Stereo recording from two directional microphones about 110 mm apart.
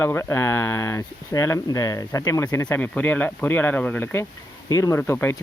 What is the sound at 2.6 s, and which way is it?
Speech, 15° left (ahead or behind).